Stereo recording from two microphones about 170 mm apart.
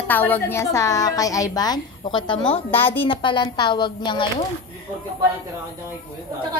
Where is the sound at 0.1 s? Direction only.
10° left (ahead or behind); by 2.6 s 30° left (ahead or behind).